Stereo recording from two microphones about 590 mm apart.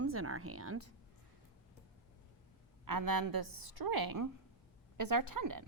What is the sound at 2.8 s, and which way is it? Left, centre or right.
A woman's voice, right.